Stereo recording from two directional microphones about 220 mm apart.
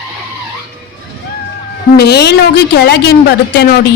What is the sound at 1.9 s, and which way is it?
Speech, 45° left (ahead or behind).